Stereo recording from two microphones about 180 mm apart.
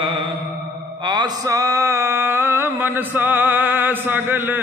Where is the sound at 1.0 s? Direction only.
25° right (ahead or behind).